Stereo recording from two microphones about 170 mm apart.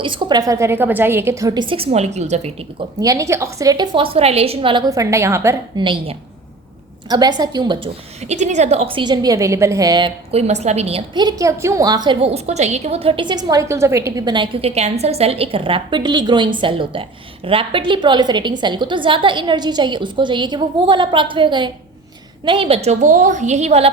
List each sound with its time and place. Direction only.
0.0 s a woman's voice: 25° right (ahead or behind)
3.0 s a woman's voice: 20° right (ahead or behind)
5.8 s a woman's voice: 30° right (ahead or behind)
8.2 s a woman's voice: 40° right (ahead or behind); by 10.1 s 25° right (ahead or behind)
10.3 s a woman's voice: 40° right (ahead or behind)